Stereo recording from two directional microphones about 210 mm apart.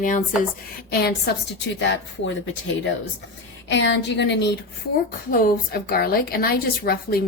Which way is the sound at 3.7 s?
60° left (ahead or behind).